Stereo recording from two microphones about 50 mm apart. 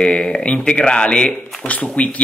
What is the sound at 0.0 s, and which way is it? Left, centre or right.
Speech, centre.